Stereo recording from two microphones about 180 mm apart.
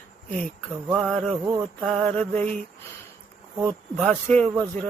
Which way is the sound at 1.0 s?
5° left (ahead or behind).